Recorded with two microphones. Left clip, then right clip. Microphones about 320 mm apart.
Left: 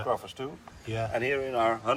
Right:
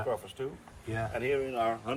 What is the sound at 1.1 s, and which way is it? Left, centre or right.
Speech, centre.